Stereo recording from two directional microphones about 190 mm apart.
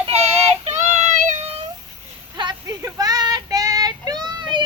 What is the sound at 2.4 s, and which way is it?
Child singing, 20° right (ahead or behind).